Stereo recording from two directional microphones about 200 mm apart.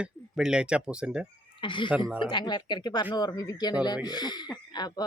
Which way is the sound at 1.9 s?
5° right (ahead or behind).